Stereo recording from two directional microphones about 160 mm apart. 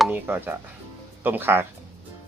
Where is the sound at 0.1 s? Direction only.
10° right (ahead or behind).